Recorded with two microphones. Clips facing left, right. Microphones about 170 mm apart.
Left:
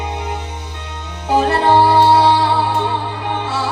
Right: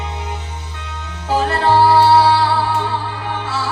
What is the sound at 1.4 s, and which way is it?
Music, 20° left (ahead or behind).